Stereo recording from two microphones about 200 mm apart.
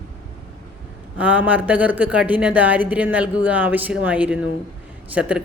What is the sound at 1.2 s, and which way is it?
A man's voice, 5° right (ahead or behind).